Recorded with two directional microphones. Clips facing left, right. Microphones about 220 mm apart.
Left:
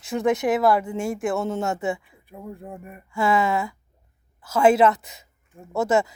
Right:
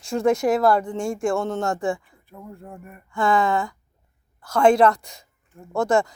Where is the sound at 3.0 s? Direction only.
5° left (ahead or behind).